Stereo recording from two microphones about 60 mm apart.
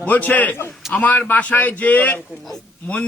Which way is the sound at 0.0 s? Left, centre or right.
Left.